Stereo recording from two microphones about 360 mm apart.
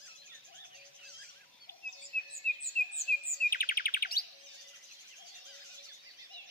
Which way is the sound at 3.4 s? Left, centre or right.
Left.